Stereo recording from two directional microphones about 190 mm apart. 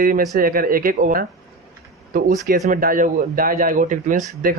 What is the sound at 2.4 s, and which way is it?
Speech, 45° right (ahead or behind).